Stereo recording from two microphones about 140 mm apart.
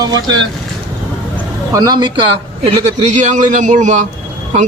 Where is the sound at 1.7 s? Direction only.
30° right (ahead or behind).